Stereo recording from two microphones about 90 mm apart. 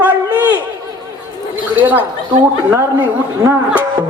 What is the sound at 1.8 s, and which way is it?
Speech, 20° right (ahead or behind).